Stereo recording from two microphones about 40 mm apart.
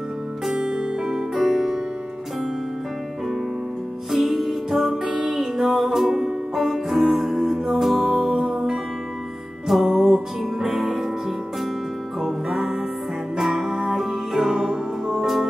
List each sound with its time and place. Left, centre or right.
0.6 s music: centre
4.1 s music: centre